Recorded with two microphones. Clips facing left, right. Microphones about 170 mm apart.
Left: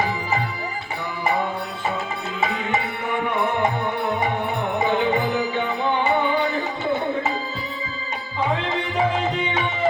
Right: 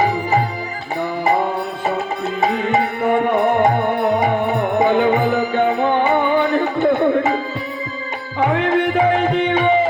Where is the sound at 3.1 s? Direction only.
55° right (ahead or behind).